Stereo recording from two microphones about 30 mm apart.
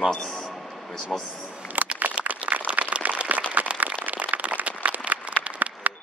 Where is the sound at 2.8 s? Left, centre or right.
Right.